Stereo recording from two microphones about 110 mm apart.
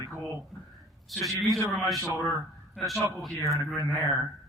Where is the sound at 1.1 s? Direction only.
Centre (ahead or behind).